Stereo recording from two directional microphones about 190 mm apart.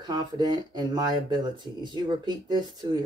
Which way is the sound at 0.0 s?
20° right (ahead or behind).